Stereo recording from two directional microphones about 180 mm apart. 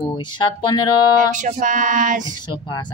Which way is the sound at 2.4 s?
25° left (ahead or behind).